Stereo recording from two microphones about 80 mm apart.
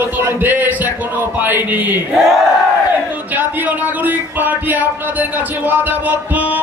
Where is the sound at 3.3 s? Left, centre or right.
Right.